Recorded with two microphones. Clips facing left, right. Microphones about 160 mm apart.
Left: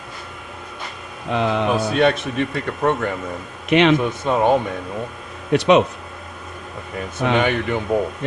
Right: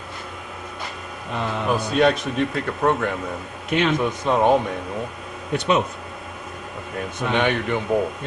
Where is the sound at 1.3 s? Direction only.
85° left.